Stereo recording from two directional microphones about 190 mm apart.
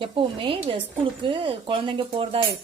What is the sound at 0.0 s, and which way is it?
Speech, 25° right (ahead or behind).